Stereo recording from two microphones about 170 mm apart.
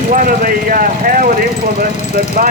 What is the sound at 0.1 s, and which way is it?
Vehicle, 55° right (ahead or behind).